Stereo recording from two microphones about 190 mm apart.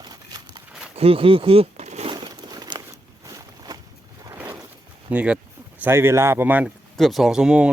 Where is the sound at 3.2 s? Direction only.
20° right (ahead or behind).